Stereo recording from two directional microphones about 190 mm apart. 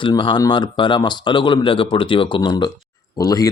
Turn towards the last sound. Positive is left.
turn(degrees=20)  # may be behind; listen again after turning